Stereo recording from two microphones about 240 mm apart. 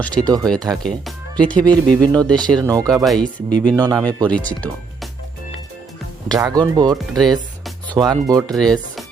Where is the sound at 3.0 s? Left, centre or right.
Centre.